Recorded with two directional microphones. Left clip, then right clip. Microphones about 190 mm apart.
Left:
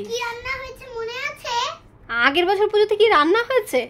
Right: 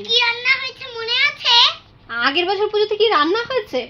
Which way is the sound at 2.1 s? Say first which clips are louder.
Even; 5° left (ahead or behind).